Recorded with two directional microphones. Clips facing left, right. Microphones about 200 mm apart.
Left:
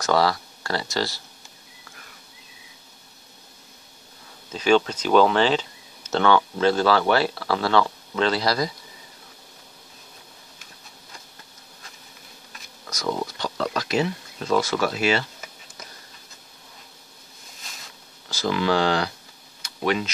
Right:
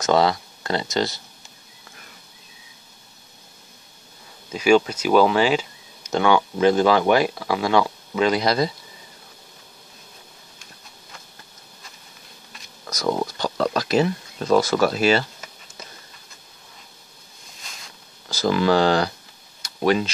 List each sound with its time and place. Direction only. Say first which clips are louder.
0.0 s speech: right 2 dB; 20° right (ahead or behind)
4.5 s speech: right 3 dB; 10° right (ahead or behind)
12.9 s speech: right 4 dB; 40° right (ahead or behind)
18.3 s speech: right 4 dB; 40° right (ahead or behind)
19.6 s a sound: right 4 dB; 35° right (ahead or behind)